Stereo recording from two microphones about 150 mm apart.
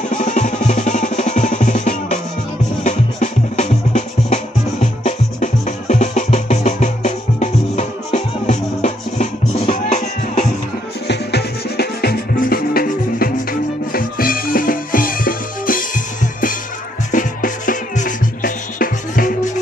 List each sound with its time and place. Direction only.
0.1 s drum: 55° left (ahead or behind)
2.8 s music: 50° left (ahead or behind)
11.3 s music: 90° left; by 19.5 s 65° left (ahead or behind)